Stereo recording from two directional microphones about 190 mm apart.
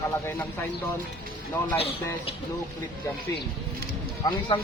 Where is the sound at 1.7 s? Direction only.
30° left (ahead or behind).